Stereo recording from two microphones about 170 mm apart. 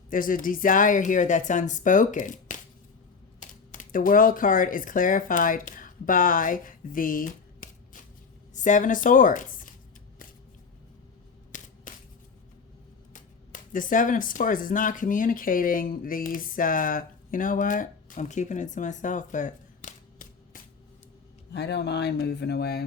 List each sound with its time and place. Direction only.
0.1 s a woman's voice: 55° left (ahead or behind)
3.7 s speech: 50° left (ahead or behind)
11.5 s a sound: 50° left (ahead or behind)
13.1 s speech: 50° left (ahead or behind)
21.5 s speech: 75° left (ahead or behind)